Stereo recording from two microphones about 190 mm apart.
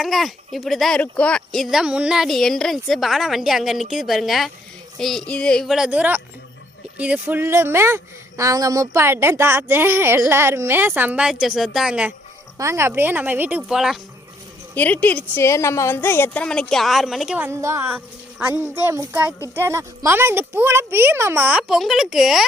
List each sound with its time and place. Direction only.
0.0 s a woman's voice: centre (ahead or behind)
14.8 s a woman's voice: 10° left (ahead or behind)